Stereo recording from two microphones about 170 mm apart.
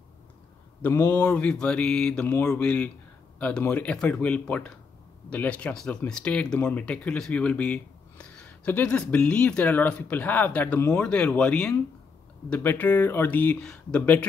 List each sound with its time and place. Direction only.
0.8 s speech: 20° left (ahead or behind)
1.1 s speech: 10° left (ahead or behind)